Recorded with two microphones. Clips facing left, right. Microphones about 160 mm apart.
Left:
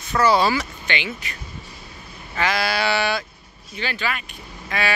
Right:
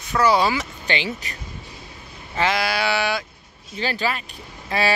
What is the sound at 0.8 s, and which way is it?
Speech, 35° right (ahead or behind).